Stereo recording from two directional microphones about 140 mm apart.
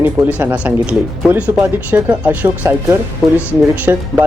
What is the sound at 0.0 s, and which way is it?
Speech, 10° right (ahead or behind).